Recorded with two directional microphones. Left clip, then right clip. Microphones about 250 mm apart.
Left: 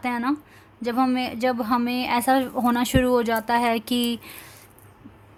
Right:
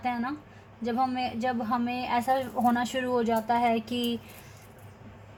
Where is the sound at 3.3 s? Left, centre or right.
Left.